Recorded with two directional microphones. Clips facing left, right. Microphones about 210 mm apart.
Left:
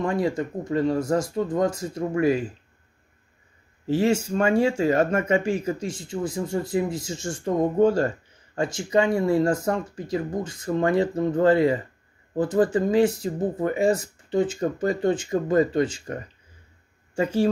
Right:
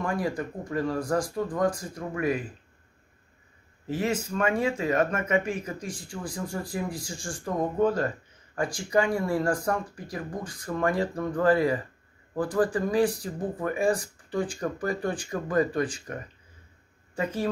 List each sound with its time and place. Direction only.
0.0 s speech: 25° left (ahead or behind)
3.8 s speech: 30° left (ahead or behind)